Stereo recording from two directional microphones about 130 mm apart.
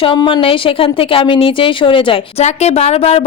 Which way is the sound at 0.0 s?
40° left (ahead or behind).